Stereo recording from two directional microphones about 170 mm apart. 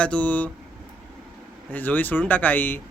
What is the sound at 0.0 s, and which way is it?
Speech, 10° left (ahead or behind).